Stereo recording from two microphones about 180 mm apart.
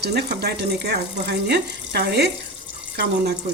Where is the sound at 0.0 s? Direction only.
65° right (ahead or behind).